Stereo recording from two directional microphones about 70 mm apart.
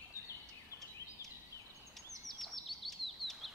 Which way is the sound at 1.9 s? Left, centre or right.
Centre.